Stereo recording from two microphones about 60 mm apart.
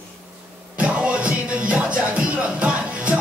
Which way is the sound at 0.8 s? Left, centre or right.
Right.